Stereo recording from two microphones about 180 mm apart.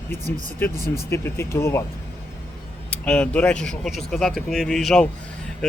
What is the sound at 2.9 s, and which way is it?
Speech, 5° left (ahead or behind).